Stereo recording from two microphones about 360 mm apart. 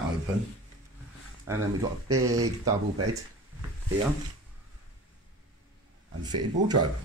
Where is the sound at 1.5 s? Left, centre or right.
Centre.